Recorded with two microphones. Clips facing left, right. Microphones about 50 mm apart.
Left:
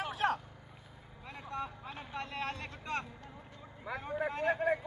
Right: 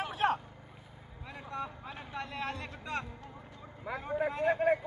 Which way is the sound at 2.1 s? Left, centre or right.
Left.